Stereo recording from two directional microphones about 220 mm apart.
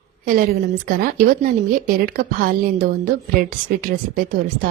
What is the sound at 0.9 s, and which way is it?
Speech, 40° right (ahead or behind).